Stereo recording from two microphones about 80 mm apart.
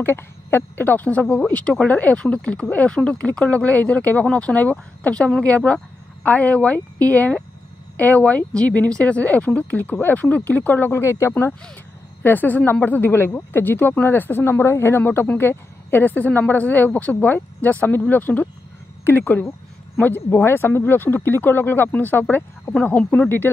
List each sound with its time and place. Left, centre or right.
0.0 s speech: left